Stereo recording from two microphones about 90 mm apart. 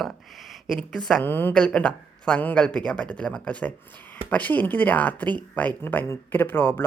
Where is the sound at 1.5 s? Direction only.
10° left (ahead or behind).